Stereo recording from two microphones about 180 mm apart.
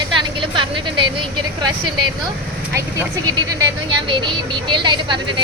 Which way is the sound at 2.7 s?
20° right (ahead or behind).